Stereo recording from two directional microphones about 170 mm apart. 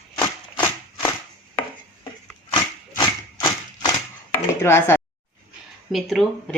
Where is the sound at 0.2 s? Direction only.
20° left (ahead or behind).